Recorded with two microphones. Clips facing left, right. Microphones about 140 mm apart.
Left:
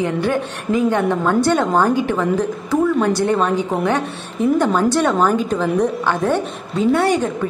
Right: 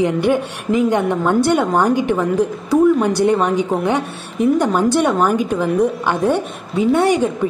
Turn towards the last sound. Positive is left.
turn(degrees=-15)  # may be behind; listen again after turning